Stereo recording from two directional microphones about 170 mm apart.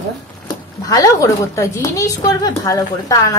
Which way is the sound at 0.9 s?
20° left (ahead or behind).